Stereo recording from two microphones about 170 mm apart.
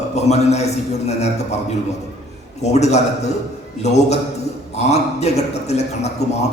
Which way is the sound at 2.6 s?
40° left (ahead or behind).